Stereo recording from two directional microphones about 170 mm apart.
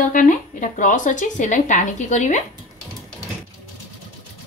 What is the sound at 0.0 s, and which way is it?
A woman's voice, 50° left (ahead or behind).